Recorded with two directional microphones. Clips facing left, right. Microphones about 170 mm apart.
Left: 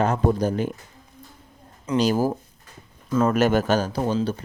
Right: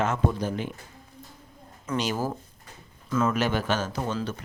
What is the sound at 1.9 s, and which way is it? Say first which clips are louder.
Speech: left 8 dB; 35° left (ahead or behind).